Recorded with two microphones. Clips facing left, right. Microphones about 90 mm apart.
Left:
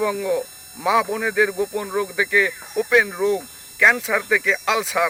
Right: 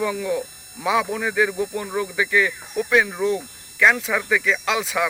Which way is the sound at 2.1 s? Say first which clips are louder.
Right 1 dB; 60° left (ahead or behind).